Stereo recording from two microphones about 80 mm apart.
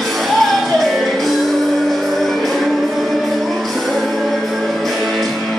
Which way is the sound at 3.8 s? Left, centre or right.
Centre.